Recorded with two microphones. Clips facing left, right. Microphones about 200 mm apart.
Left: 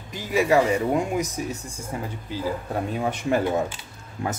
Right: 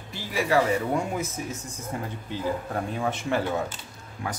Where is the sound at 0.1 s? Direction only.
20° left (ahead or behind).